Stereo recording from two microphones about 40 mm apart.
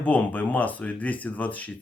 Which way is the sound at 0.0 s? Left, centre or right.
Left.